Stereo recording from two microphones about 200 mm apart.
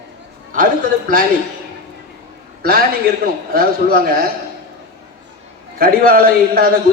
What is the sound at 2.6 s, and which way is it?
A man's voice, 50° right (ahead or behind).